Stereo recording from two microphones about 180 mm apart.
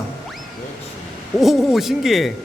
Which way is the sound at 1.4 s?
Centre (ahead or behind).